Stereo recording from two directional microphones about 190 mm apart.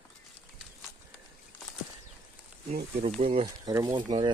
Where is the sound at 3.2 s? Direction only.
30° right (ahead or behind).